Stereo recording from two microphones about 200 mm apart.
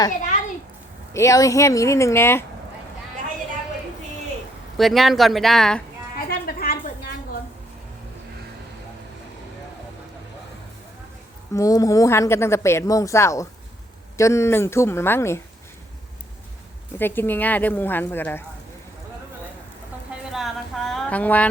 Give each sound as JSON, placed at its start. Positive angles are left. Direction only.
{"t": 1.1, "sound": "a woman's voice", "side_deg": 15}
{"t": 4.8, "sound": "speech", "side_deg": 0}
{"t": 6.1, "sound": "a sound", "side_deg": 45}
{"t": 11.5, "sound": "a woman's voice", "side_deg": 15}
{"t": 17.0, "sound": "a woman's voice", "side_deg": 10}
{"t": 20.3, "sound": "a sound", "side_deg": 0}